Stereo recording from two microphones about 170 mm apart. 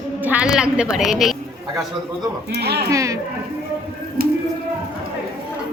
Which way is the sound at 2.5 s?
70° right (ahead or behind).